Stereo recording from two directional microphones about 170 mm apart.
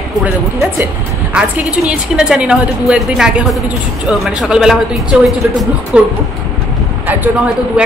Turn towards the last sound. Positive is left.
turn(degrees=-5)  # may be behind; listen again after turning